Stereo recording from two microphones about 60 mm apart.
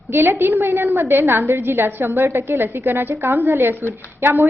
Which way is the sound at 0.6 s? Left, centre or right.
Right.